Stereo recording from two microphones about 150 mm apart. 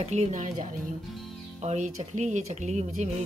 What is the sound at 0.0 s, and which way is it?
Speech, 45° right (ahead or behind).